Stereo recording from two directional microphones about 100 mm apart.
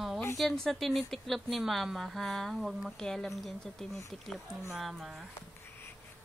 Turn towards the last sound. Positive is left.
turn(degrees=-5)  # may be behind; listen again after turning